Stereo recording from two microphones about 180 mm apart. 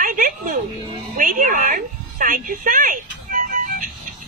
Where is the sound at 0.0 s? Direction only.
50° right (ahead or behind).